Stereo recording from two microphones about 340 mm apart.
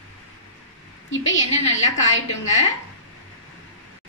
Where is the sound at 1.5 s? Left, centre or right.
Centre.